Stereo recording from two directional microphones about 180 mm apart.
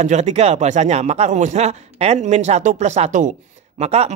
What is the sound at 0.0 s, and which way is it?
Speech, 40° right (ahead or behind).